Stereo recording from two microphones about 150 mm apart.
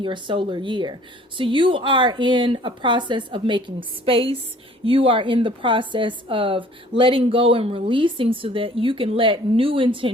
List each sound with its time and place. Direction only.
0.0 s speech: 30° right (ahead or behind)